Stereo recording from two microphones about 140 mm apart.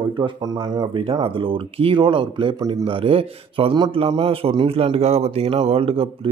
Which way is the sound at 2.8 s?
40° right (ahead or behind).